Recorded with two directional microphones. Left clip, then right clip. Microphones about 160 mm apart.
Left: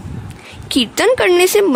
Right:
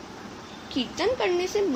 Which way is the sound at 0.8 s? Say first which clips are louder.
Left 12 dB; 70° left (ahead or behind).